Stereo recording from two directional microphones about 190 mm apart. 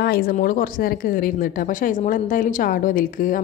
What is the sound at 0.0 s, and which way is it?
A woman's voice, 55° left (ahead or behind).